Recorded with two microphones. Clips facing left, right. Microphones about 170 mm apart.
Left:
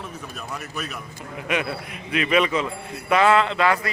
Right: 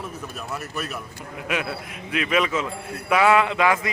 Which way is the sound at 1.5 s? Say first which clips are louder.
Left 2 dB; centre (ahead or behind).